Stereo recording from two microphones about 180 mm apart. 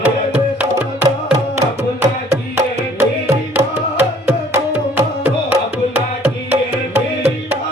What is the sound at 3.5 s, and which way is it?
Music, 10° right (ahead or behind).